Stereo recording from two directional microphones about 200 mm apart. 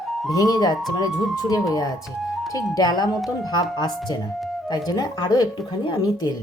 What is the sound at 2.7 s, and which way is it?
Speech, 20° left (ahead or behind).